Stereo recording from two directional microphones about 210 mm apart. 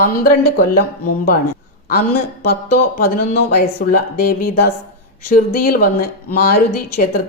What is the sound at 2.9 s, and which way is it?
Speech, 45° left (ahead or behind).